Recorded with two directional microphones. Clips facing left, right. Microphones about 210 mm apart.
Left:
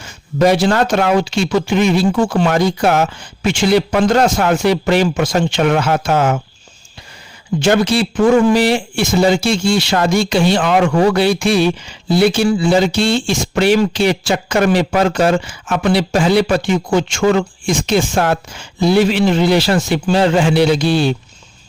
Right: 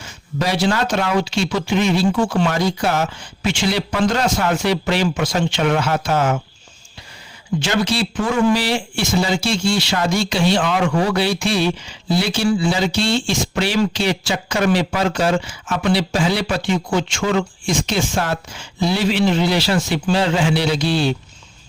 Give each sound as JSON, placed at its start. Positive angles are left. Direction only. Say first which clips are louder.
{"t": 0.0, "sound": "speech", "louder": "left 9 dB", "side_deg": 50}
{"t": 7.6, "sound": "speech", "louder": "left 7 dB", "side_deg": 50}